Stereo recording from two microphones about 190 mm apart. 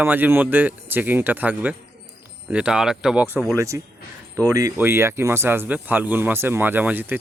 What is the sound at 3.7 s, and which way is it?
Speech, 15° right (ahead or behind).